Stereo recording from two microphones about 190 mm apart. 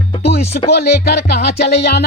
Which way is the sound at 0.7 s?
55° left (ahead or behind).